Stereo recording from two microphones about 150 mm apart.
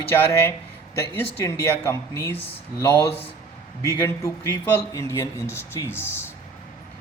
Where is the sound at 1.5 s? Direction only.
20° left (ahead or behind).